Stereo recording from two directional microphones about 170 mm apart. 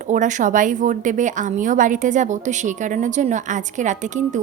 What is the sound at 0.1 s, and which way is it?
Speech, 45° right (ahead or behind).